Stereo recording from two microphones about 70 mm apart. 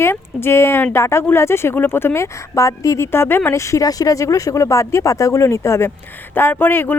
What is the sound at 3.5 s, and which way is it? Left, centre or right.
Speech, left.